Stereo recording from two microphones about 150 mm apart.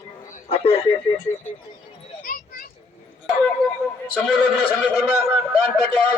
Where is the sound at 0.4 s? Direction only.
40° left (ahead or behind).